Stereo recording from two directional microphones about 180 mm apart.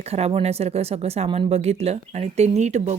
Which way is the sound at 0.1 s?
35° right (ahead or behind).